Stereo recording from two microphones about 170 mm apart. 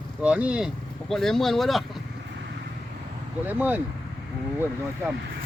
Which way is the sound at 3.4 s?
10° right (ahead or behind).